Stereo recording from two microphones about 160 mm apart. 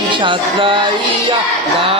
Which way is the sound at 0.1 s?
30° right (ahead or behind).